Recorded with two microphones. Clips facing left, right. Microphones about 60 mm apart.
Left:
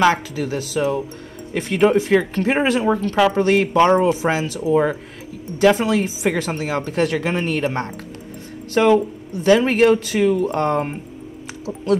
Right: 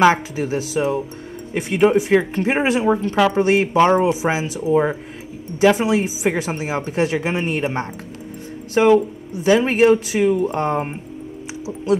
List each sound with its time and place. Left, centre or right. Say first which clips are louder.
0.0 s speech: right 2 dB; right
5.8 s speech: right 1 dB; right